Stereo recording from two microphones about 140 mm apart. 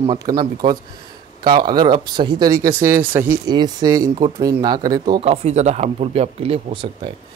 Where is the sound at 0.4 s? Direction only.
30° right (ahead or behind); by 3.3 s 15° right (ahead or behind).